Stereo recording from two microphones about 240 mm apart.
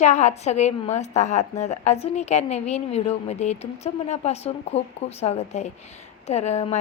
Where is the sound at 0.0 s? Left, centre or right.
Left.